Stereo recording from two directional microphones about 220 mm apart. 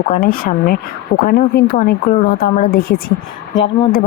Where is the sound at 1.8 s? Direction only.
40° left (ahead or behind).